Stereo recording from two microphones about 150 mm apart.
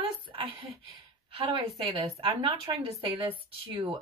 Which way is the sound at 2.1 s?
40° right (ahead or behind).